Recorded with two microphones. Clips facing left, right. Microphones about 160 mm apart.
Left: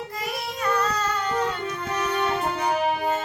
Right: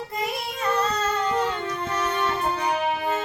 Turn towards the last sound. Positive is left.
turn(degrees=-25)  # may be behind; listen again after turning